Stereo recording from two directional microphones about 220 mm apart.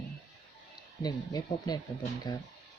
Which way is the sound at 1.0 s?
20° left (ahead or behind).